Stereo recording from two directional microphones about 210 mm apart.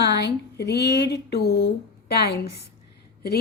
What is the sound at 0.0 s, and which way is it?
A woman's voice, 55° left (ahead or behind).